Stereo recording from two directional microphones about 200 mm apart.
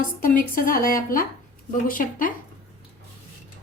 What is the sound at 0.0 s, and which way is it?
A woman's voice, 45° left (ahead or behind).